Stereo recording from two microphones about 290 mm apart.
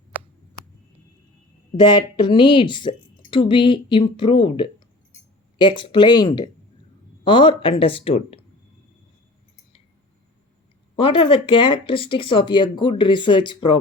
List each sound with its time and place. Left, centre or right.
1.7 s speech: centre
10.9 s speech: centre